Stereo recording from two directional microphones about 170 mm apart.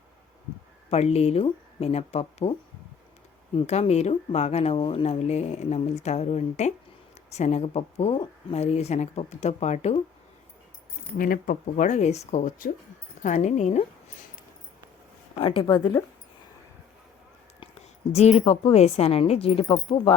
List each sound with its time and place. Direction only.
0.9 s speech: 40° left (ahead or behind)
3.7 s speech: 40° left (ahead or behind)
11.2 s speech: 55° left (ahead or behind)
15.4 s speech: 30° left (ahead or behind)
18.1 s speech: 40° left (ahead or behind)